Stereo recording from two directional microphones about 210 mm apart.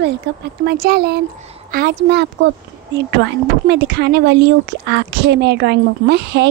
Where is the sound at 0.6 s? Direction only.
45° right (ahead or behind).